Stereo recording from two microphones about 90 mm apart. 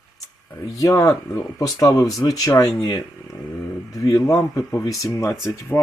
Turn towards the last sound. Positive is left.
turn(degrees=30)  # may be behind; listen again after turning